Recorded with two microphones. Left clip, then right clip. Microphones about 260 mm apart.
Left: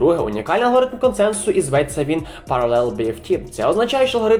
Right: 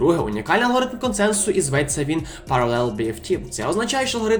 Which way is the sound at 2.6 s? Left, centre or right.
Right.